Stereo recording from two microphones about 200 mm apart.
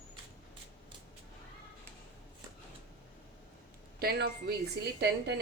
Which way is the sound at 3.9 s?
50° right (ahead or behind).